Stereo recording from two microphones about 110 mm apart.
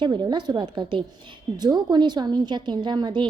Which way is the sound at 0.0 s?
40° right (ahead or behind).